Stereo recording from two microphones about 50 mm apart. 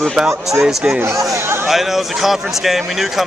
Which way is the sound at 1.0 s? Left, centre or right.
Right.